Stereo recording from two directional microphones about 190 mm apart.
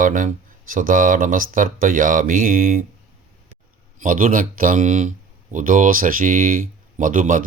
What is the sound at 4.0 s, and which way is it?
Speech, 45° right (ahead or behind).